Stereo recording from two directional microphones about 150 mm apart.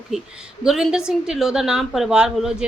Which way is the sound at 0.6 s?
5° right (ahead or behind).